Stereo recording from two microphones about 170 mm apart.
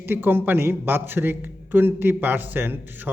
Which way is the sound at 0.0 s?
10° right (ahead or behind).